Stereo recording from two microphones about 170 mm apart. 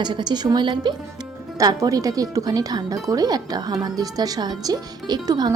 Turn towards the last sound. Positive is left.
turn(degrees=-25)  # may be behind; listen again after turning